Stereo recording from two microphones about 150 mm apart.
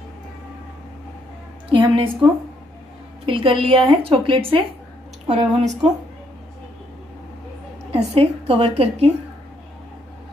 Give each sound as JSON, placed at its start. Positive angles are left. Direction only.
{"t": 1.7, "sound": "speech", "side_deg": -35}
{"t": 3.3, "sound": "speech", "side_deg": -35}
{"t": 5.2, "sound": "a woman's voice", "side_deg": -50}
{"t": 7.9, "sound": "a woman's voice", "side_deg": -40}